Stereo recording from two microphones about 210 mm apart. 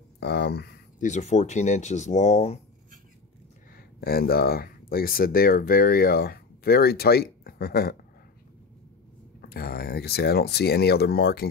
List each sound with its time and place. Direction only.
0.2 s a sound: 50° left (ahead or behind)
1.0 s speech: 35° left (ahead or behind)
3.7 s speech: 45° left (ahead or behind)
9.4 s speech: 45° left (ahead or behind)